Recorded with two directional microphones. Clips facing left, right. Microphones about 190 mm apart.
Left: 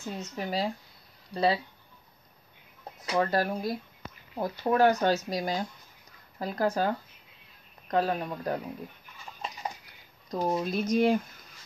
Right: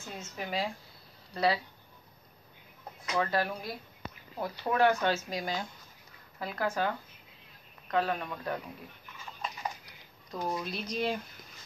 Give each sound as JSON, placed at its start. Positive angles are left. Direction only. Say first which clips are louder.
{"t": 0.2, "sound": "speech", "louder": "left 3 dB", "side_deg": 35}
{"t": 3.0, "sound": "speech", "louder": "left 4 dB", "side_deg": 40}
{"t": 10.3, "sound": "speech", "louder": "left 6 dB", "side_deg": 35}